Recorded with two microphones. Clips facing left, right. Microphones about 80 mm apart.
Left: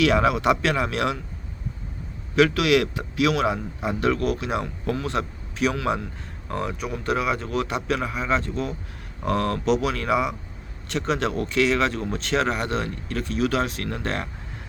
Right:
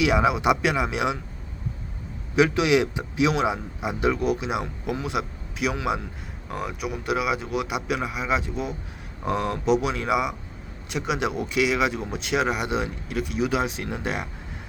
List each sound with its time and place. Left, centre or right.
0.0 s a man's voice: centre
2.3 s a man's voice: centre